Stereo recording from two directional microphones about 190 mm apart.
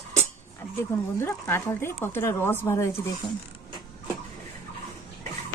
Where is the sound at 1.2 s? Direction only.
10° left (ahead or behind).